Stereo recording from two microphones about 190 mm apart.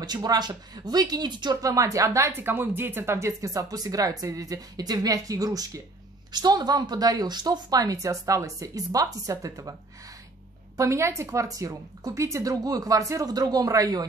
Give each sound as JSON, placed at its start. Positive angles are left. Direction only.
{"t": 0.0, "sound": "speech", "side_deg": -20}
{"t": 10.8, "sound": "a woman's voice", "side_deg": -15}